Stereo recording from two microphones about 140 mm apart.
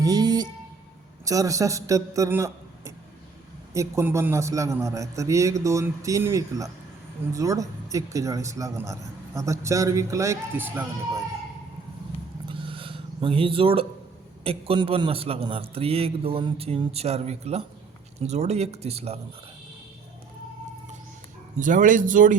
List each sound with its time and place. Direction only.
0.0 s music: 30° right (ahead or behind)
1.2 s a man's voice: 25° right (ahead or behind)
12.5 s a sound: 40° right (ahead or behind)
14.4 s a man's voice: 40° right (ahead or behind)
21.6 s speech: 70° right (ahead or behind)